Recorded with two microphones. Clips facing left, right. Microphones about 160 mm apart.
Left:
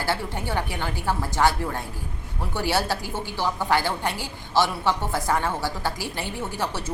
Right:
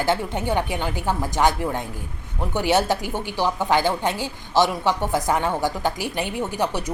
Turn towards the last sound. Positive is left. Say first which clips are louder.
# right 4 dB
turn(degrees=-15)  # may be behind; listen again after turning